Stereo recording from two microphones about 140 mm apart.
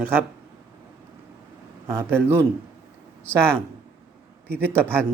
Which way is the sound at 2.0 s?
15° right (ahead or behind).